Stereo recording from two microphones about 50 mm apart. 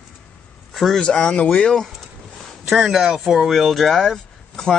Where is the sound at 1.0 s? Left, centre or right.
Centre.